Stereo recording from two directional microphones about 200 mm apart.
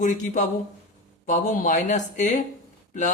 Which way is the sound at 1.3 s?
40° left (ahead or behind).